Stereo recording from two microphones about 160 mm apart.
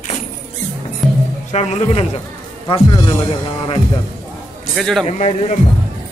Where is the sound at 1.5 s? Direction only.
45° left (ahead or behind).